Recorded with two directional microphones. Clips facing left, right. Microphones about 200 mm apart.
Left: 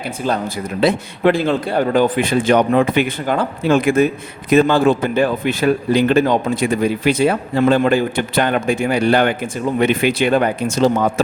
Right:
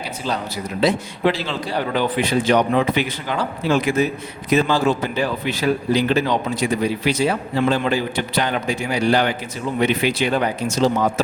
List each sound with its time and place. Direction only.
0.8 s speech: 55° left (ahead or behind)